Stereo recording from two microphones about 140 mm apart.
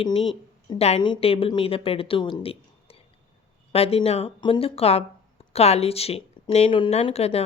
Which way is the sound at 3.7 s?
45° left (ahead or behind).